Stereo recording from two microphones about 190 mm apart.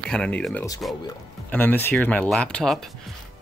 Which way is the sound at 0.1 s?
5° left (ahead or behind).